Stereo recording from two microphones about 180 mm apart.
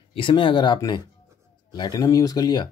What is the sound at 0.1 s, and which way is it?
Speech, 30° left (ahead or behind).